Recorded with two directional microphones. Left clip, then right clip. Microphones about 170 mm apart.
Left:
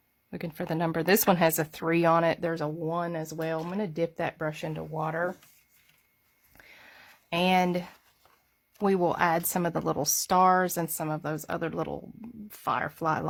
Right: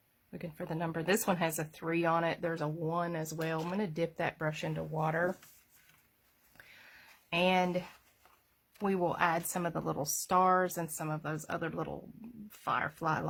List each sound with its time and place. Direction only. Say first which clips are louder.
0.3 s speech: left 7 dB; 55° left (ahead or behind); by 5.3 s 20° left (ahead or behind)
6.6 s a sound: left 4 dB; 40° left (ahead or behind)
8.8 s speech: left 6 dB; 50° left (ahead or behind)